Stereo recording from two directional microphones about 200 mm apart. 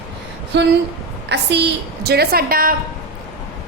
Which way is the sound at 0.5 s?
60° right (ahead or behind).